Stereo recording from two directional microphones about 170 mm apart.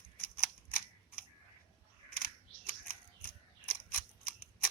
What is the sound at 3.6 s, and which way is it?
Scissors, 10° left (ahead or behind).